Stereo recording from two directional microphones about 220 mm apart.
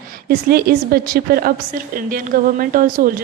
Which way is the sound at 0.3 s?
45° right (ahead or behind).